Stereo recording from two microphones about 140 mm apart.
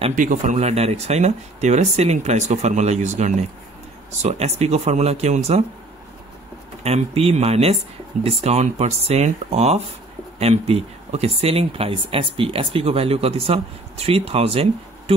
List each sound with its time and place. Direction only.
0.1 s speech: 70° right (ahead or behind); by 5.7 s 50° right (ahead or behind)
6.8 s speech: 50° right (ahead or behind)